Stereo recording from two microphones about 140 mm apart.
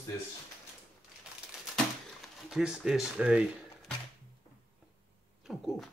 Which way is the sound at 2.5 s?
5° right (ahead or behind).